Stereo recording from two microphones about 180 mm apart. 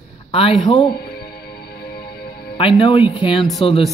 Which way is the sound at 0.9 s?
65° left (ahead or behind).